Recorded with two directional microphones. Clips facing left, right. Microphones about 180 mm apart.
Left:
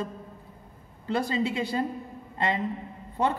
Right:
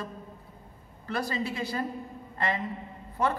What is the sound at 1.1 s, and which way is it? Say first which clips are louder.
Speech: left 4 dB; 20° left (ahead or behind).